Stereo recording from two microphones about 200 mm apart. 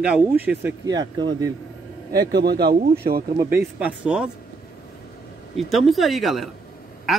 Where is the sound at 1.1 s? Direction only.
20° right (ahead or behind).